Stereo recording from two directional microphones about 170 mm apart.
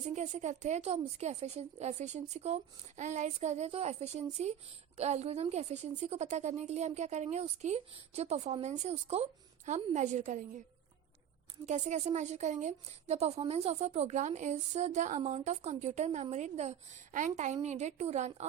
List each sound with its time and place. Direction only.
0.1 s a woman's voice: 45° right (ahead or behind)
11.6 s a woman's voice: 45° right (ahead or behind)